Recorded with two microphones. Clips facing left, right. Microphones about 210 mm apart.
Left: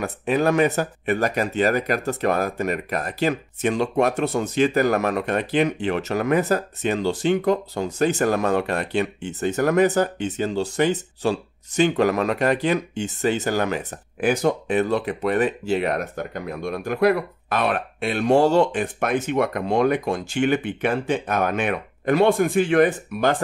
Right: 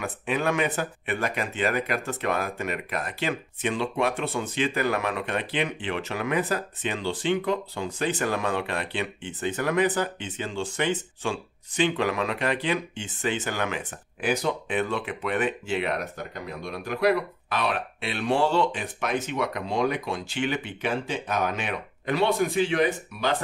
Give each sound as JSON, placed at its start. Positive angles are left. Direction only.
{"t": 0.0, "sound": "speech", "side_deg": 40}